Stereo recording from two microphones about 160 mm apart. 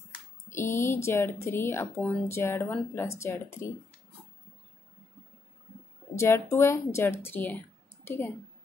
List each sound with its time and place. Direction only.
0.5 s speech: 15° left (ahead or behind)
6.1 s speech: 15° left (ahead or behind)
8.0 s a sound: 15° left (ahead or behind)